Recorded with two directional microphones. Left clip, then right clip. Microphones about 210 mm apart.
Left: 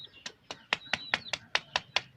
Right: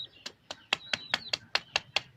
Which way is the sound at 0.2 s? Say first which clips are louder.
Even; 10° left (ahead or behind).